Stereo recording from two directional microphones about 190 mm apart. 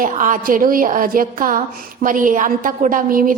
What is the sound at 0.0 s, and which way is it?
A woman's voice, 45° right (ahead or behind).